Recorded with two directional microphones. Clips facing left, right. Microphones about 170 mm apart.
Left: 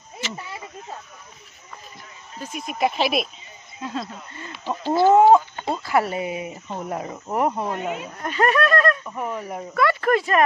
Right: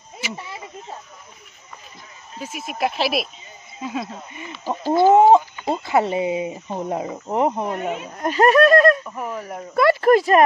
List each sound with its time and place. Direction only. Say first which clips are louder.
2.3 s speech: right 1 dB; 5° right (ahead or behind)
8.2 s speech: right 6 dB; 35° right (ahead or behind)
9.0 s speech: even; centre (ahead or behind)
9.8 s speech: right 5 dB; 35° right (ahead or behind)